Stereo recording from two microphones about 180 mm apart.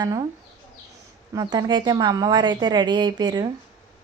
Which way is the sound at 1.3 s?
20° right (ahead or behind).